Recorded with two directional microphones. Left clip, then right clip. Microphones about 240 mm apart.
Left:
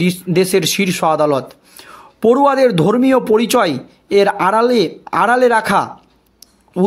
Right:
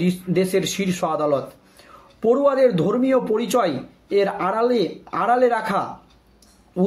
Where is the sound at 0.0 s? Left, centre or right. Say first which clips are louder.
Left 6 dB; left.